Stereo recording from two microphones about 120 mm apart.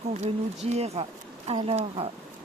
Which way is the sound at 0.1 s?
70° right (ahead or behind).